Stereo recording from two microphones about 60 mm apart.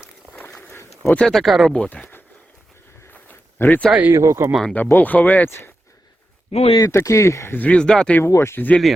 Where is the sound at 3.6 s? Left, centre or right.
Left.